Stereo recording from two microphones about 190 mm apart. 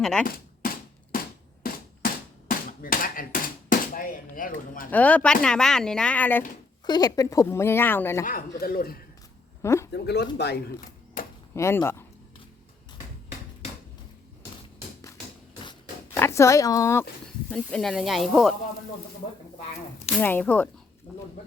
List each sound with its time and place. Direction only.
0.0 s speech: 5° left (ahead or behind)
2.5 s hammer: 45° left (ahead or behind)
4.9 s speech: 10° left (ahead or behind)
6.8 s speech: 20° left (ahead or behind)
8.2 s speech: 45° left (ahead or behind)
9.6 s speech: 15° left (ahead or behind)
9.9 s speech: 60° left (ahead or behind)
11.5 s speech: 15° left (ahead or behind)
16.1 s speech: 15° left (ahead or behind)
17.5 s speech: centre (ahead or behind)
20.1 s speech: 10° left (ahead or behind)